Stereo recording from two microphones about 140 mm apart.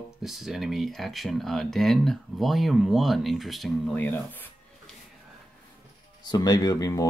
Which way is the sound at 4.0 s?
10° left (ahead or behind).